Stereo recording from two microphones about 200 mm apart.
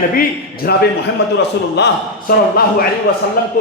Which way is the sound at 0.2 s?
50° left (ahead or behind).